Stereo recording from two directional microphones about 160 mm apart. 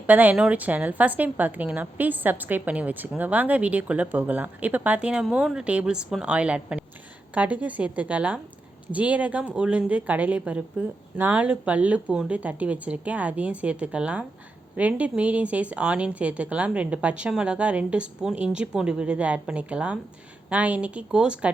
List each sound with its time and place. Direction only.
0.1 s a woman's voice: 10° right (ahead or behind)